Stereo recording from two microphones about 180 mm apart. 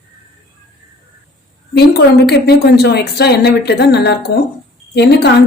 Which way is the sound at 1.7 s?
65° left (ahead or behind).